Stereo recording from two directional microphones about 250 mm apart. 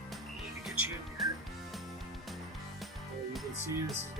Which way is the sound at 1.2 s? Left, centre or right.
Centre.